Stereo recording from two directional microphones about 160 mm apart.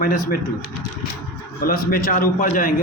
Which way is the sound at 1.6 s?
65° left (ahead or behind).